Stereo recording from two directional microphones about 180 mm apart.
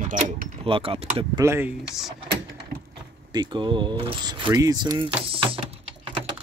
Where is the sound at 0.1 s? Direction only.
45° right (ahead or behind).